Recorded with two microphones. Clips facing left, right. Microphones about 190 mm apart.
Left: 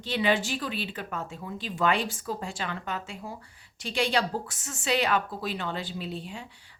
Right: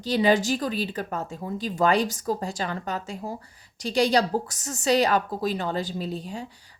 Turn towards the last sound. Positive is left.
turn(degrees=-40)  # may be behind; listen again after turning